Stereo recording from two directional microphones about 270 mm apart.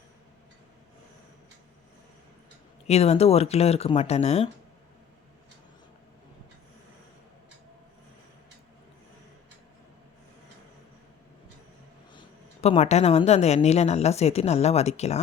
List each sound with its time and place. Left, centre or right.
2.8 s a woman's voice: left
12.6 s a woman's voice: left